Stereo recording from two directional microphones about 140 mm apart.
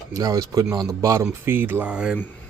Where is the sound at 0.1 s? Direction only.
25° right (ahead or behind); by 2.1 s 5° right (ahead or behind).